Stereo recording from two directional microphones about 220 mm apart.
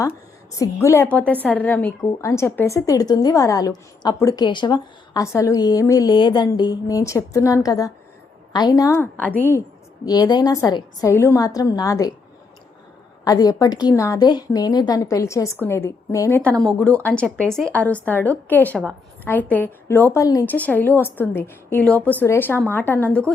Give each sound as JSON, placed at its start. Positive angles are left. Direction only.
{"t": 0.6, "sound": "a woman's voice", "side_deg": 15}
{"t": 13.2, "sound": "a woman's voice", "side_deg": 15}